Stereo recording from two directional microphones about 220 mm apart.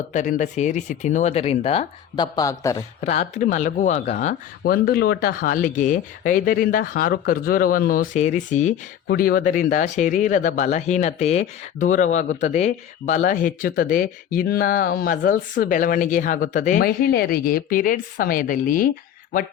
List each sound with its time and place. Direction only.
0.1 s speech: 35° left (ahead or behind); by 2.8 s 15° left (ahead or behind)
3.0 s speech: 30° left (ahead or behind)